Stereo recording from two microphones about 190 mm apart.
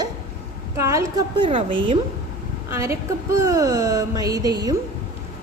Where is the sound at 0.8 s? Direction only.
15° right (ahead or behind).